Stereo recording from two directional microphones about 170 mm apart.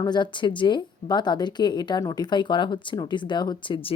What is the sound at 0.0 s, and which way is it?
Speech, 25° left (ahead or behind).